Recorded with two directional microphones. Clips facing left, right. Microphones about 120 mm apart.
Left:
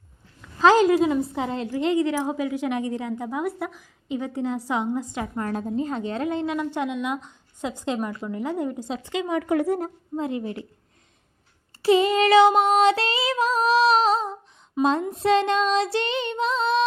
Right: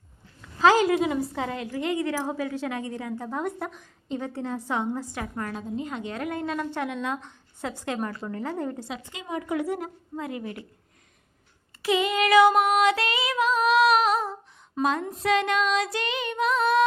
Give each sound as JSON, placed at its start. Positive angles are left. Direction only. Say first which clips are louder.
{"t": 1.3, "sound": "a woman's voice", "louder": "left 3 dB", "side_deg": 20}
{"t": 3.2, "sound": "a woman's voice", "louder": "left 3 dB", "side_deg": 5}
{"t": 5.7, "sound": "a woman's voice", "louder": "left 4 dB", "side_deg": 35}
{"t": 9.1, "sound": "speech", "louder": "left 7 dB", "side_deg": 75}
{"t": 9.6, "sound": "child singing", "louder": "left 5 dB", "side_deg": 40}
{"t": 10.2, "sound": "a woman's voice", "louder": "left 5 dB", "side_deg": 25}
{"t": 11.8, "sound": "child singing", "louder": "left 5 dB", "side_deg": 35}
{"t": 14.8, "sound": "a woman's voice", "louder": "left 4 dB", "side_deg": 25}